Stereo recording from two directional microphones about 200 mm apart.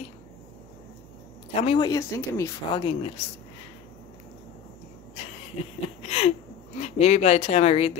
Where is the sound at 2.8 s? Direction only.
30° left (ahead or behind).